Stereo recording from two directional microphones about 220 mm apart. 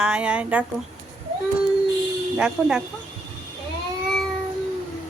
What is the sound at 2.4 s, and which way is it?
Speech, 5° right (ahead or behind).